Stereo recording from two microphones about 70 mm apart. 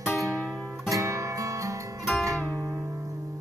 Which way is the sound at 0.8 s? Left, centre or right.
Right.